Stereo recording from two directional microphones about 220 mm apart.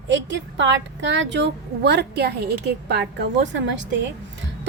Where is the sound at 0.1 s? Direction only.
55° right (ahead or behind).